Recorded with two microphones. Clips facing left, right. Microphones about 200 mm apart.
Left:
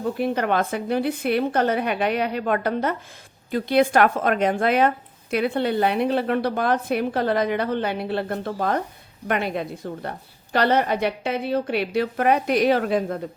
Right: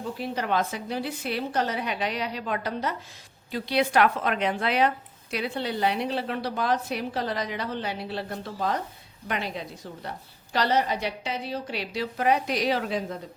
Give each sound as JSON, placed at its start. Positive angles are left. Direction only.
{"t": 0.0, "sound": "speech", "side_deg": 55}